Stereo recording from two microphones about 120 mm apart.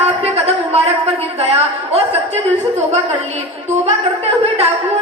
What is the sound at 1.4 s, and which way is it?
Speech, 55° right (ahead or behind).